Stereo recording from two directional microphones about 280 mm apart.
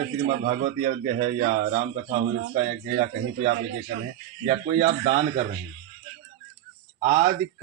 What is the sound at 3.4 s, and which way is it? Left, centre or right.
A man's voice, right.